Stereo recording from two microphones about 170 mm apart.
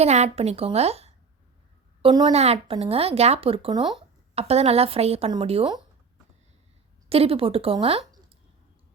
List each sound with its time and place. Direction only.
0.0 s a woman's voice: 40° right (ahead or behind)
2.3 s speech: 40° right (ahead or behind)
7.1 s speech: 35° right (ahead or behind)